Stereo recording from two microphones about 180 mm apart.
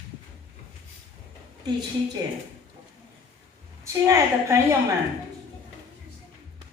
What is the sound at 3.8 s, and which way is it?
Speech, 15° right (ahead or behind).